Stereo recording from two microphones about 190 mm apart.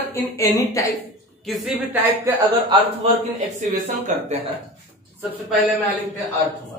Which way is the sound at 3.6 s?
40° right (ahead or behind).